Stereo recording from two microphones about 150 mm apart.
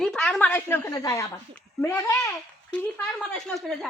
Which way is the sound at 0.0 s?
5° left (ahead or behind).